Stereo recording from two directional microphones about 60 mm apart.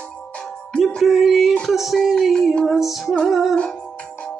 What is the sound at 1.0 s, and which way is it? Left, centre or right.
Music, centre.